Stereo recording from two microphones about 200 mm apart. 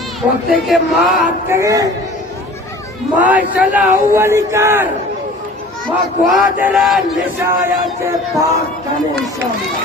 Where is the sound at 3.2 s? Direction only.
5° right (ahead or behind).